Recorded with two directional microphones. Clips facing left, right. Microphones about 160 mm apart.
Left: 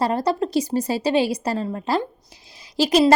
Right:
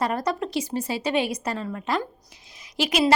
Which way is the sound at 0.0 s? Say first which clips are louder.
Left 4 dB; 30° left (ahead or behind).